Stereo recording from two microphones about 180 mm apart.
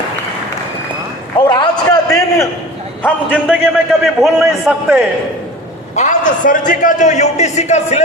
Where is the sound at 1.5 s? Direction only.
20° left (ahead or behind).